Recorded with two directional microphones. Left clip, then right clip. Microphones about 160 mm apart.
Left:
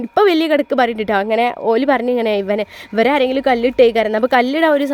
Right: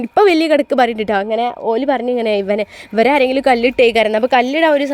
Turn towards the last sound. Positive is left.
turn(degrees=15)  # may be behind; listen again after turning